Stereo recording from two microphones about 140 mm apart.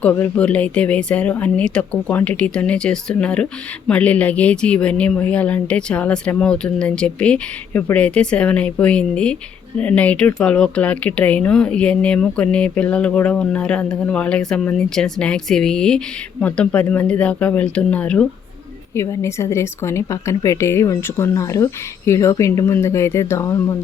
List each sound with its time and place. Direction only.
0.0 s speech: 10° left (ahead or behind)
18.9 s speech: 20° left (ahead or behind)